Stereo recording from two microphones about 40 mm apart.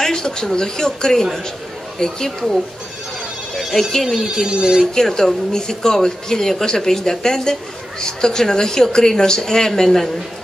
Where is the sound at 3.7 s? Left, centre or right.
Centre.